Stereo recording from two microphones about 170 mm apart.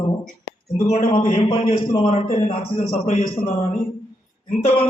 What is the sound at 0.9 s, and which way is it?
A man's voice, 40° left (ahead or behind).